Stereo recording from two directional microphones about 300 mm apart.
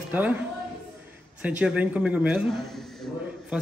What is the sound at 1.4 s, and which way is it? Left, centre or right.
A man's voice, centre.